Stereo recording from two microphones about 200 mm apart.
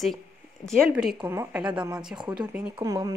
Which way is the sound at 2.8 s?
20° right (ahead or behind).